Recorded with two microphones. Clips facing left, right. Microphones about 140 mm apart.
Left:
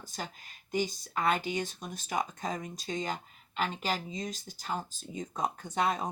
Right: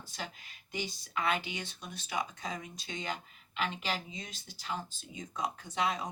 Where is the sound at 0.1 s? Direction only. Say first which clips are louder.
Left 2 dB; 45° left (ahead or behind).